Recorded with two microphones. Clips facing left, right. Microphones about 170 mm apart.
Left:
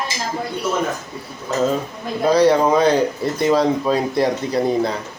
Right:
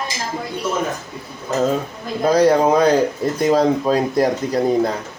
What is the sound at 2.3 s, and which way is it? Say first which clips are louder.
Speech: even; 45° right (ahead or behind).